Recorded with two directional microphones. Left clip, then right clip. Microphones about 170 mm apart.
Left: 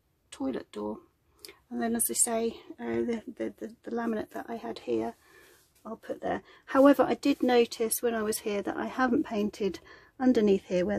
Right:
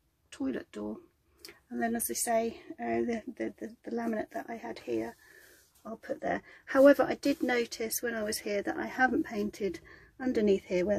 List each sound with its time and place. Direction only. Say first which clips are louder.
0.5 s speech: left 3 dB; 20° left (ahead or behind); by 11.0 s 40° left (ahead or behind)